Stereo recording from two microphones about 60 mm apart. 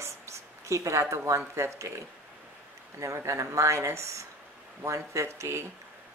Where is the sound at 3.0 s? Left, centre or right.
Right.